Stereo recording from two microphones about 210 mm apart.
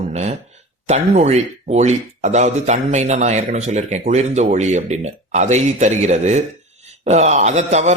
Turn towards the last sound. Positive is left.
turn(degrees=-35)  # may be behind; listen again after turning